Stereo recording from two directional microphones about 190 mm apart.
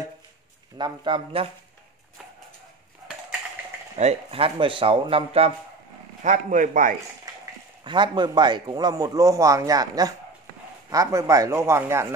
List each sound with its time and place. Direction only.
0.7 s a man's voice: 25° right (ahead or behind)
3.9 s a man's voice: 35° right (ahead or behind)
6.2 s a man's voice: 45° right (ahead or behind)
7.8 s a man's voice: 25° right (ahead or behind)